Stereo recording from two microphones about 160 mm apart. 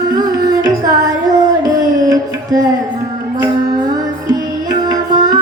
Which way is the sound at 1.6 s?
25° right (ahead or behind).